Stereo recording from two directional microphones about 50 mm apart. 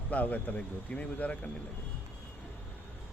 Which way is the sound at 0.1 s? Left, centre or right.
Left.